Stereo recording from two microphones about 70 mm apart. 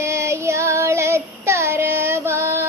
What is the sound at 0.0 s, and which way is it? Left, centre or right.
Child singing, right.